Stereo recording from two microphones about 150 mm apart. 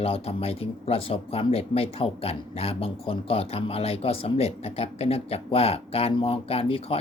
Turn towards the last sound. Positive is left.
turn(degrees=40)  # may be behind; listen again after turning